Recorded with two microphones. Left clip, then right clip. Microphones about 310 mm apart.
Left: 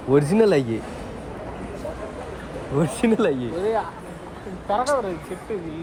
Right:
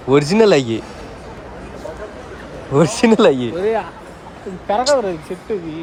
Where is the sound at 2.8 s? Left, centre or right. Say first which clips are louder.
Right 9 dB; centre.